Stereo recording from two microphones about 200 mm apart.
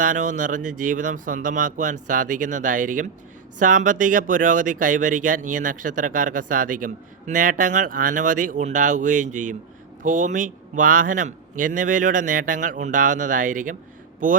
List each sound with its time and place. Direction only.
0.0 s speech: 40° right (ahead or behind)